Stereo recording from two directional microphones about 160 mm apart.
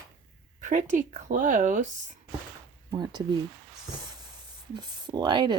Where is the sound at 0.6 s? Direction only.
50° right (ahead or behind).